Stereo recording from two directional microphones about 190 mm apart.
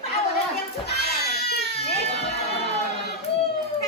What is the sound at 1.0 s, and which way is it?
Baby cry, 55° left (ahead or behind).